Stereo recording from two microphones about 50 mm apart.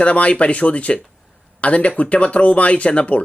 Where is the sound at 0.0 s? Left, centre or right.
Left.